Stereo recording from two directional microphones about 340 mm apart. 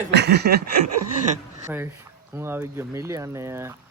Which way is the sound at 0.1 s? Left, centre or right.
Right.